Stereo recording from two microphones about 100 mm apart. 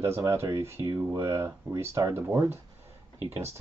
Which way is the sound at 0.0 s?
25° right (ahead or behind).